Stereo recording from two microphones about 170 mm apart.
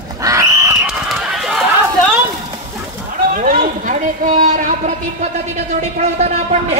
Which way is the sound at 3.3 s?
55° right (ahead or behind).